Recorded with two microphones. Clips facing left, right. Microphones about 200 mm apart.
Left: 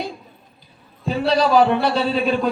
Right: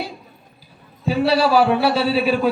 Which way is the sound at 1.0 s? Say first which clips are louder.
Right 1 dB; 5° right (ahead or behind).